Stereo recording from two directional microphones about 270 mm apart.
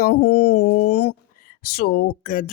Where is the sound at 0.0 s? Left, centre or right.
Left.